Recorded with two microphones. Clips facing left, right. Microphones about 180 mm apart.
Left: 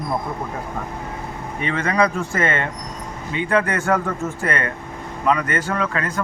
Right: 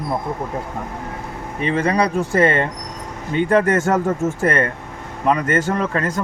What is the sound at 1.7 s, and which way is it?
Speech, 35° right (ahead or behind).